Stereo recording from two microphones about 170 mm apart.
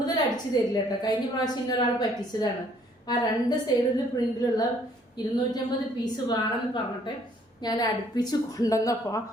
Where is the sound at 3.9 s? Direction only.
20° left (ahead or behind).